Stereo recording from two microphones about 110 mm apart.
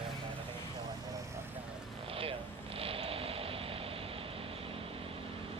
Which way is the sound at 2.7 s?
60° right (ahead or behind).